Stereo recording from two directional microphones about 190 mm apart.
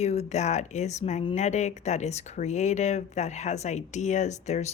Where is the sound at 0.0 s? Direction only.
35° left (ahead or behind).